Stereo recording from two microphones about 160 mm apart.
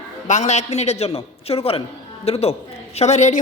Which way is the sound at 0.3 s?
45° left (ahead or behind).